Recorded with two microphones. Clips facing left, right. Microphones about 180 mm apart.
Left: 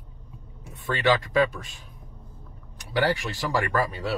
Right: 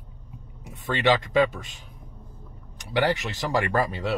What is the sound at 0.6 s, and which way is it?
A man's voice, 20° right (ahead or behind).